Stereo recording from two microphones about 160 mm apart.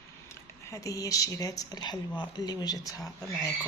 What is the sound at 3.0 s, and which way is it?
Speech, centre (ahead or behind).